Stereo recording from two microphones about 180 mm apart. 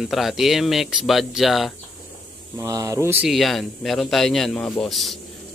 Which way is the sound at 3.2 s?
Centre (ahead or behind).